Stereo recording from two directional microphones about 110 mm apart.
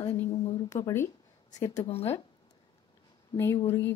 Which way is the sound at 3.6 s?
25° left (ahead or behind).